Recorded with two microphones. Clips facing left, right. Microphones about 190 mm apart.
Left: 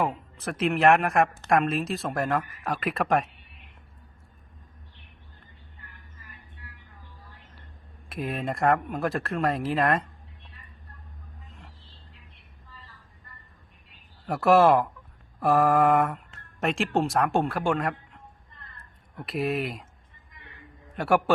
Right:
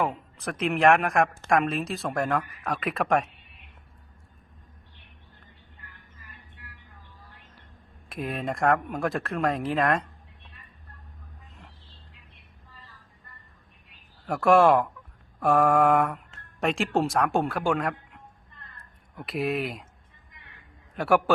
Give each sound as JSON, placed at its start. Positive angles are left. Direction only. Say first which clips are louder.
{"t": 0.0, "sound": "speech", "louder": "even", "side_deg": 0}
{"t": 8.1, "sound": "speech", "louder": "even", "side_deg": 0}
{"t": 14.3, "sound": "speech", "louder": "even", "side_deg": 0}
{"t": 19.1, "sound": "speech", "louder": "even", "side_deg": 0}
{"t": 20.9, "sound": "speech", "louder": "even", "side_deg": 0}